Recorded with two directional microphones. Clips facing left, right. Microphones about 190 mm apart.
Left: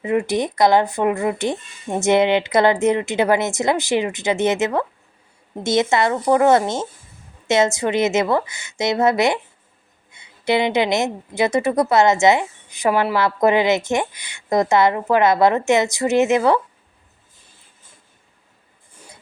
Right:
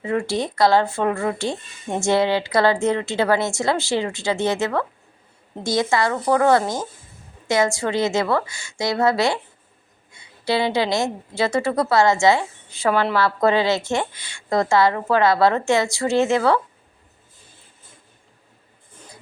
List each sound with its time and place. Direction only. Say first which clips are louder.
0.0 s a woman's voice: left 3 dB; 20° left (ahead or behind)